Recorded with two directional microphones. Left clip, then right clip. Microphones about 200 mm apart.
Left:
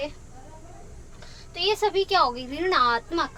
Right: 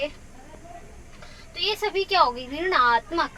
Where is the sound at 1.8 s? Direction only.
40° left (ahead or behind).